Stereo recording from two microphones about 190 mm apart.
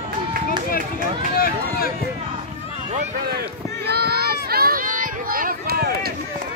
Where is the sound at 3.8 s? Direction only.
60° right (ahead or behind).